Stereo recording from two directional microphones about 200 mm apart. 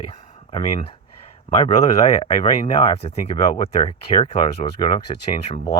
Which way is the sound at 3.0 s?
30° left (ahead or behind).